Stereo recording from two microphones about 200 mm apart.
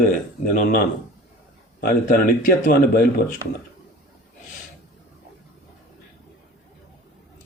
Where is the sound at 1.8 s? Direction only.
45° left (ahead or behind).